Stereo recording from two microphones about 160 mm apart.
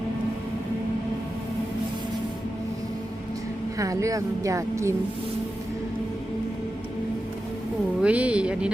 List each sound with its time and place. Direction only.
3.8 s speech: 20° right (ahead or behind)
8.0 s speech: 10° right (ahead or behind)